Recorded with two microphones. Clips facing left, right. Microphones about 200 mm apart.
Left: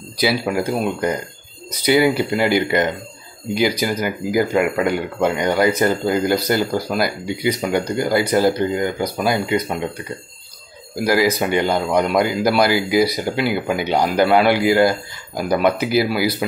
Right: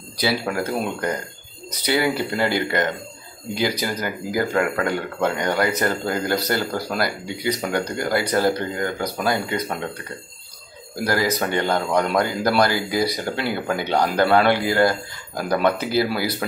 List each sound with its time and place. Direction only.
0.2 s speech: 10° left (ahead or behind)
11.1 s speech: 10° left (ahead or behind)